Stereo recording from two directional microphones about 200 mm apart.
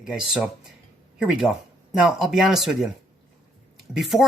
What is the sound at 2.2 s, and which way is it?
Speech, centre (ahead or behind).